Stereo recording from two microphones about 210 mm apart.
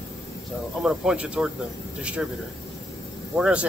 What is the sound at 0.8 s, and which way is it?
Speech, 5° right (ahead or behind).